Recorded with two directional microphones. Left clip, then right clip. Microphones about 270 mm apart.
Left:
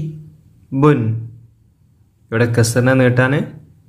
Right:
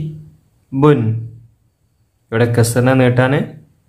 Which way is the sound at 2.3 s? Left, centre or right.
Centre.